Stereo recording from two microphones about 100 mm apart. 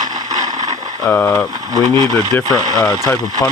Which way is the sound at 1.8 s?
40° right (ahead or behind).